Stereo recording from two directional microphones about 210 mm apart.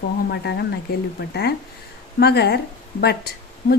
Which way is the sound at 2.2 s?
50° left (ahead or behind).